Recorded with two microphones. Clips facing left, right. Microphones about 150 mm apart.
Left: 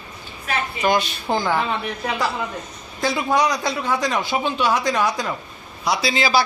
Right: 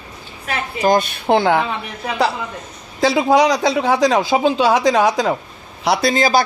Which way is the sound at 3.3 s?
90° right.